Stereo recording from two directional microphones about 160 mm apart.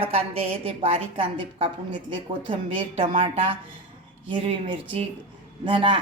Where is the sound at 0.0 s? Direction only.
35° right (ahead or behind).